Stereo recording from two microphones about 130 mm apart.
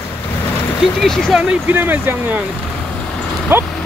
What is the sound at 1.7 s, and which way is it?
Speech, 15° right (ahead or behind).